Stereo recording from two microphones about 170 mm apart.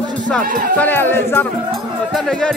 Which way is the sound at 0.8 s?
10° left (ahead or behind).